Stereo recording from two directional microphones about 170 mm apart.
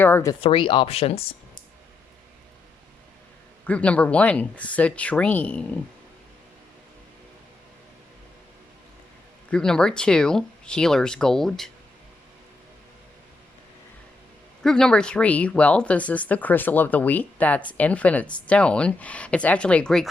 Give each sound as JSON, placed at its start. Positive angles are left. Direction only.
{"t": 0.0, "sound": "speech", "side_deg": 15}
{"t": 0.4, "sound": "speech", "side_deg": 30}
{"t": 3.7, "sound": "speech", "side_deg": 10}
{"t": 9.5, "sound": "speech", "side_deg": 5}
{"t": 14.6, "sound": "speech", "side_deg": 5}